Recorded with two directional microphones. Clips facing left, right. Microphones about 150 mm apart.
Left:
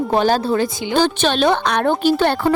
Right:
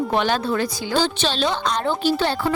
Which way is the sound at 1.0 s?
55° left (ahead or behind).